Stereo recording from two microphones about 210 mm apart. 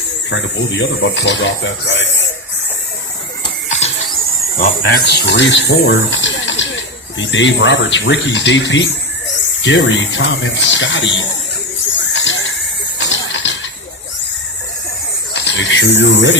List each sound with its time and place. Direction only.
0.3 s speech: 60° left (ahead or behind)
3.7 s a sound: 30° left (ahead or behind)
4.5 s speech: 40° left (ahead or behind)
5.0 s speech: 55° left (ahead or behind)
11.9 s a sound: 60° left (ahead or behind)
15.3 s speech: 60° left (ahead or behind)